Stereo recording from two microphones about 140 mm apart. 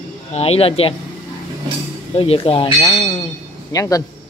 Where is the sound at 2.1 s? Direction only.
40° left (ahead or behind).